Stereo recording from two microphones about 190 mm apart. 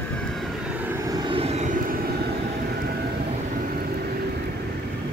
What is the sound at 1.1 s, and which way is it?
Vehicle, 25° right (ahead or behind).